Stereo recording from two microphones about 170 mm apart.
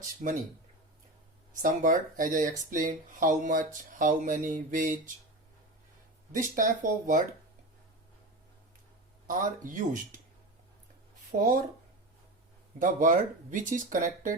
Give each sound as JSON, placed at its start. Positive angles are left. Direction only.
{"t": 0.2, "sound": "speech", "side_deg": -45}
{"t": 1.6, "sound": "speech", "side_deg": -50}
{"t": 6.3, "sound": "speech", "side_deg": -50}
{"t": 9.2, "sound": "speech", "side_deg": -50}
{"t": 11.3, "sound": "speech", "side_deg": -50}
{"t": 12.8, "sound": "speech", "side_deg": -50}